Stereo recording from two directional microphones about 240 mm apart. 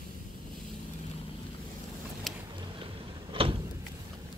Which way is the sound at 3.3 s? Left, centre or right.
Right.